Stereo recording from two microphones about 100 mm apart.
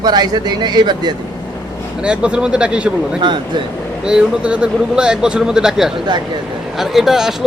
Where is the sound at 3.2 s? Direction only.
50° right (ahead or behind).